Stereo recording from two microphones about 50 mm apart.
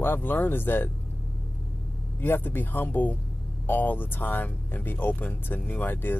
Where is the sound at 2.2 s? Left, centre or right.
Left.